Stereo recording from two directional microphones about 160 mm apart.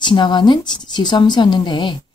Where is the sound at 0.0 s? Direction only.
30° left (ahead or behind).